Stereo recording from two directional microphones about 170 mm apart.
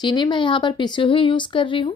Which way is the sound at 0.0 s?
25° left (ahead or behind).